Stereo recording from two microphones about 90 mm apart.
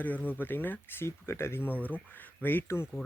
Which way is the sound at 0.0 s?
20° left (ahead or behind).